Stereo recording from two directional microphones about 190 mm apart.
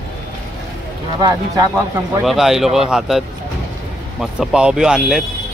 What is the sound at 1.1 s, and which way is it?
Speech, 20° right (ahead or behind).